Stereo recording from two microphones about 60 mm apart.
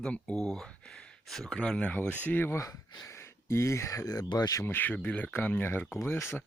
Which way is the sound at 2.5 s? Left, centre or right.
Left.